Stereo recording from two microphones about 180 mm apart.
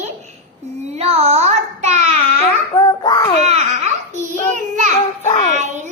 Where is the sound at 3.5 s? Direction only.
35° right (ahead or behind).